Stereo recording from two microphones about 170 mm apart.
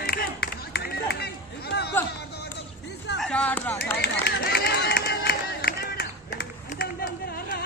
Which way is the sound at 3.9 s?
70° left (ahead or behind).